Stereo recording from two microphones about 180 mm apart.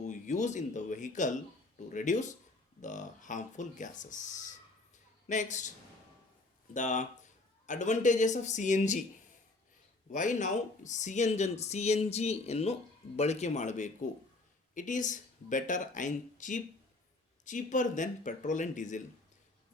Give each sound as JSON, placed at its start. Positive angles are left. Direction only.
{"t": 0.0, "sound": "speech", "side_deg": 45}
{"t": 6.7, "sound": "speech", "side_deg": 40}
{"t": 10.1, "sound": "speech", "side_deg": 45}